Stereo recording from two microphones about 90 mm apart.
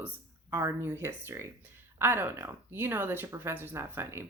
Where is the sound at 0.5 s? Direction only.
30° right (ahead or behind).